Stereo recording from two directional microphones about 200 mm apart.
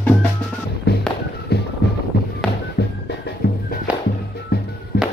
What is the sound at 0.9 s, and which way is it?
Music, 50° left (ahead or behind).